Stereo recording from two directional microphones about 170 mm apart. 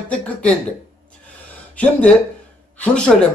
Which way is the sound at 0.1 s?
5° left (ahead or behind).